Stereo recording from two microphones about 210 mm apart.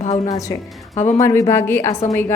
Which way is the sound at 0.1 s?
15° left (ahead or behind).